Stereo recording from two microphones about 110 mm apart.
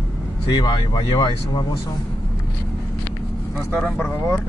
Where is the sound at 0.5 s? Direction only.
40° left (ahead or behind).